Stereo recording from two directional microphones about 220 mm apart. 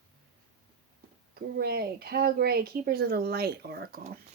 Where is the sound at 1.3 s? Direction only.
45° right (ahead or behind).